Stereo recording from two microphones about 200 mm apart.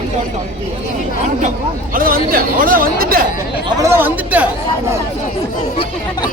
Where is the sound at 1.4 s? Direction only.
40° right (ahead or behind).